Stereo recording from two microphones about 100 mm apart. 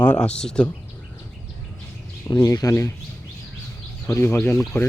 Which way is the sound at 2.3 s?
35° left (ahead or behind).